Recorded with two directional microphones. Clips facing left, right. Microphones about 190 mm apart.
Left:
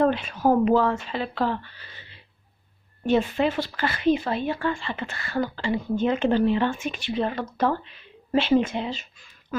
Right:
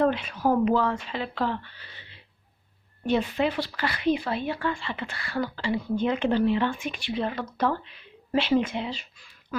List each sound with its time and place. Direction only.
0.2 s speech: 45° left (ahead or behind)
3.1 s speech: 45° left (ahead or behind)